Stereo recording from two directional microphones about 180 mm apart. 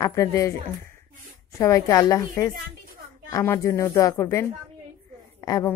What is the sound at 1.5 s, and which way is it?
A woman's voice, 20° left (ahead or behind).